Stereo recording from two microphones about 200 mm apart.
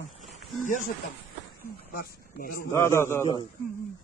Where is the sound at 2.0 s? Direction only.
45° left (ahead or behind).